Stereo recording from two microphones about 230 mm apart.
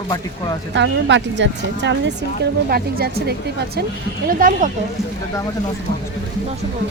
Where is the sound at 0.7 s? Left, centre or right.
Right.